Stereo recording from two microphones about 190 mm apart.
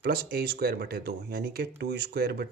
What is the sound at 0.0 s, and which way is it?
Speech, 55° right (ahead or behind).